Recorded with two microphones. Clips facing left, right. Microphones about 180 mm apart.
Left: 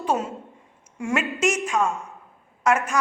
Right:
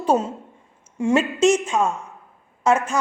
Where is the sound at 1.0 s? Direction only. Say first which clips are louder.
Right 6 dB; 20° right (ahead or behind).